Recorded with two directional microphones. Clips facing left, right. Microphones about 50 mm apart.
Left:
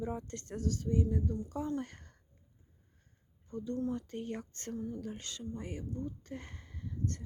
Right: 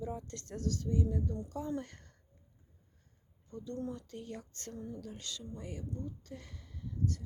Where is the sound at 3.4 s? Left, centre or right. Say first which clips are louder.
Left 5 dB; left.